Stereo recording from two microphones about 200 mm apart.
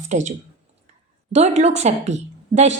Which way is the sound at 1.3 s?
35° right (ahead or behind).